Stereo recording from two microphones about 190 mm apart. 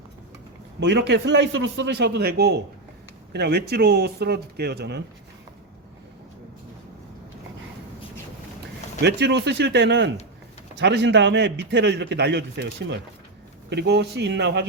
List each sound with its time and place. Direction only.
0.8 s a man's voice: 65° right (ahead or behind)
9.0 s a man's voice: 65° right (ahead or behind)